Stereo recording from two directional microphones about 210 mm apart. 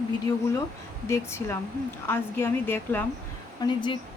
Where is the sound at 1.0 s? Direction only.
10° left (ahead or behind).